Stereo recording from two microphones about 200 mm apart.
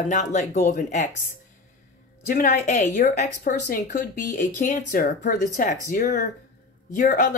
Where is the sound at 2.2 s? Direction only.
40° left (ahead or behind).